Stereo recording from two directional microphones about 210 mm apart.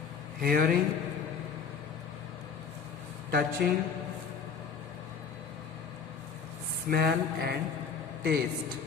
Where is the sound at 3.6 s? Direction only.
45° right (ahead or behind).